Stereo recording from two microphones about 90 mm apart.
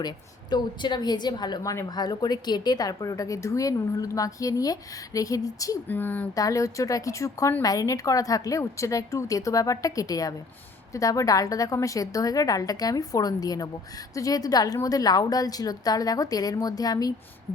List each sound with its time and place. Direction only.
0.5 s a woman's voice: 55° left (ahead or behind); by 5.7 s 40° left (ahead or behind)
5.9 s speech: 20° left (ahead or behind)
6.3 s a woman's voice: 40° left (ahead or behind)